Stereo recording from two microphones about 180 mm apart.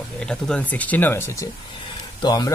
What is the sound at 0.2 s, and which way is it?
Speech, 5° left (ahead or behind).